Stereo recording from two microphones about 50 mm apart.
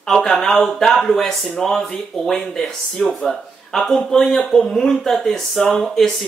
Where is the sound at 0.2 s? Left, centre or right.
Centre.